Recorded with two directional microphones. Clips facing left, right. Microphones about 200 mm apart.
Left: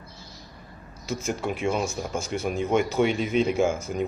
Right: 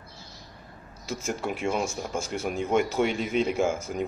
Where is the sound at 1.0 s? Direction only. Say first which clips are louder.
Left 2 dB; 5° right (ahead or behind).